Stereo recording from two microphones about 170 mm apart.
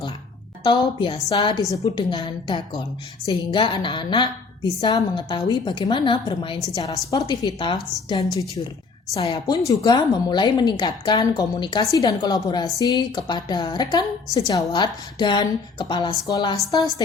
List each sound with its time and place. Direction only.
0.6 s a woman's voice: 30° left (ahead or behind)